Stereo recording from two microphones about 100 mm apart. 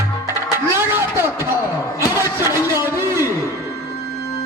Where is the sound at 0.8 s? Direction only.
25° right (ahead or behind).